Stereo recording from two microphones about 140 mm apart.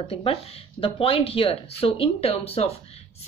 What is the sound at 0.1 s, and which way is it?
Speech, 40° left (ahead or behind).